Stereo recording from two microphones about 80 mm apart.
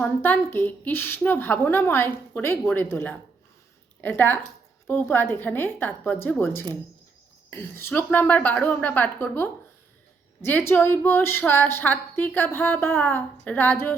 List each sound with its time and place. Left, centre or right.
0.2 s a woman's voice: left